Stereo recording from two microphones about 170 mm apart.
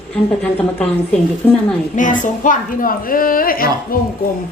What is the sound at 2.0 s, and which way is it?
A woman's voice, 50° left (ahead or behind).